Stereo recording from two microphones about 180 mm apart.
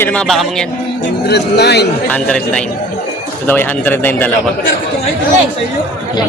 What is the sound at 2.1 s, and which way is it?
Speech, 5° left (ahead or behind).